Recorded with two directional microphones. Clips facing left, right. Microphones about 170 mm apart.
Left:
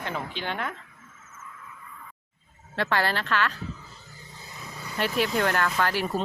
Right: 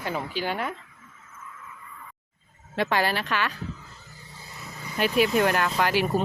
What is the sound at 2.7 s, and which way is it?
Speech, 15° right (ahead or behind).